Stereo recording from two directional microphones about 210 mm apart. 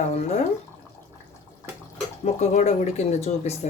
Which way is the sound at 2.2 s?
35° left (ahead or behind).